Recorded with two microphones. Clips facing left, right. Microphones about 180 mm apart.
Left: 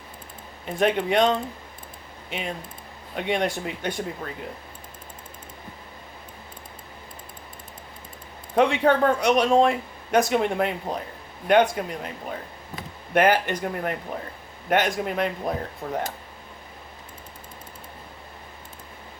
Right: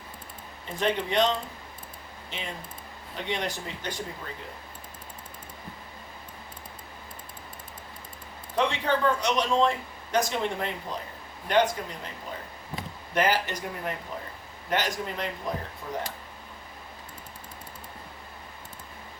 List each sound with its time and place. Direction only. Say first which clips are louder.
0.8 s speech: left 5 dB; 55° left (ahead or behind)
3.2 s speech: left 7 dB; 55° left (ahead or behind)
8.5 s speech: left 7 dB; 60° left (ahead or behind)